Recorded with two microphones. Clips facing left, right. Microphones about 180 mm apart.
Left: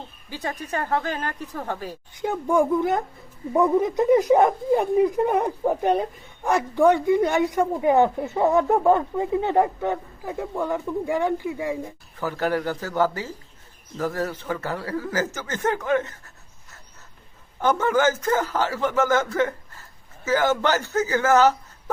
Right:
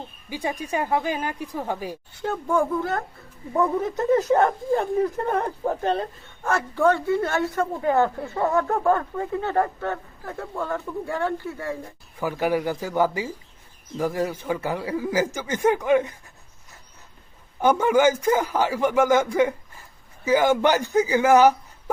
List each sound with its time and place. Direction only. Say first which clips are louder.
0.3 s speech: right 2 dB; 10° right (ahead or behind)
2.1 s speech: left 2 dB; 15° left (ahead or behind)
12.2 s speech: right 1 dB; 10° right (ahead or behind)
17.6 s speech: right 2 dB; 10° right (ahead or behind)